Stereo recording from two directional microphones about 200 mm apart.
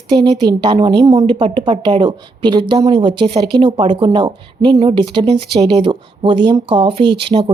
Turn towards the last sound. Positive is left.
turn(degrees=-25)  # may be behind; listen again after turning